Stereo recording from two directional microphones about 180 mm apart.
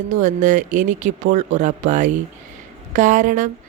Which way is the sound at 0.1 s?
45° right (ahead or behind).